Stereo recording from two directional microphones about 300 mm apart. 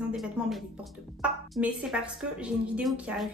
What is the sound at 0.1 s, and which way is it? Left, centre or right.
A woman's voice, centre.